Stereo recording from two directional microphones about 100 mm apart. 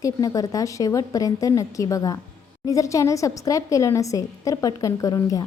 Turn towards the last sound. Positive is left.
turn(degrees=35)  # may be behind; listen again after turning